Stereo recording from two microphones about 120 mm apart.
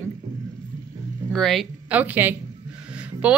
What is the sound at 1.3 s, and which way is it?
Speech, 5° left (ahead or behind).